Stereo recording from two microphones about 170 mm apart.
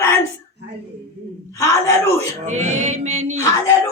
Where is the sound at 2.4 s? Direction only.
45° right (ahead or behind).